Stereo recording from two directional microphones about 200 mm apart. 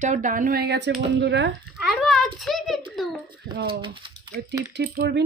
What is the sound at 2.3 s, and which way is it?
Speech, centre (ahead or behind).